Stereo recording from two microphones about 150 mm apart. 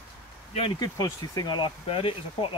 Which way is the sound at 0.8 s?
25° left (ahead or behind).